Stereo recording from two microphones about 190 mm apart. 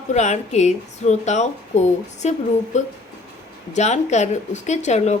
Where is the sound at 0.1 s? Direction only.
35° left (ahead or behind).